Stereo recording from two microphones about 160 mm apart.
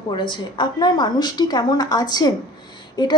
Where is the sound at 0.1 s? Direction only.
30° left (ahead or behind).